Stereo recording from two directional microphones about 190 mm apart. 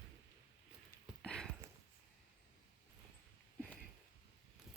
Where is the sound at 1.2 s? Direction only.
5° left (ahead or behind).